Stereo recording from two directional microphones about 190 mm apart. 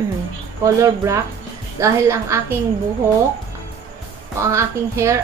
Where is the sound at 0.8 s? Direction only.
15° right (ahead or behind).